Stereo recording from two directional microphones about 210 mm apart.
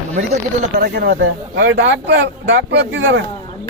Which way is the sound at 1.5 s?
60° right (ahead or behind).